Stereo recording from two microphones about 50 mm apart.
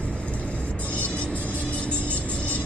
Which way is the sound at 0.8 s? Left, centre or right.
Left.